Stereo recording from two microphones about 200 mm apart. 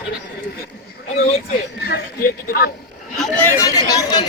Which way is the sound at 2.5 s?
50° left (ahead or behind).